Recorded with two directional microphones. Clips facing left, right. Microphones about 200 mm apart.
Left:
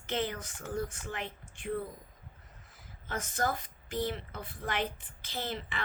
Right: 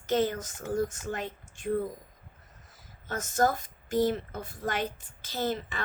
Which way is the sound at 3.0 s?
45° right (ahead or behind).